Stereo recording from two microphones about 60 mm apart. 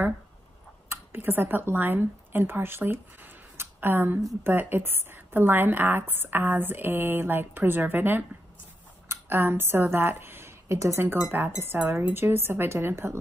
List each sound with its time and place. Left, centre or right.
0.8 s a woman's voice: right
11.2 s speech: right
12.0 s a woman's voice: right